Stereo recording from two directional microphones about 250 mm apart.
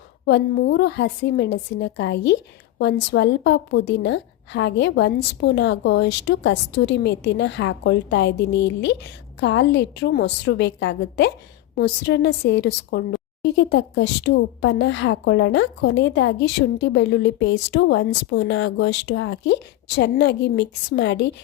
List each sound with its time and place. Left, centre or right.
0.3 s a woman's voice: left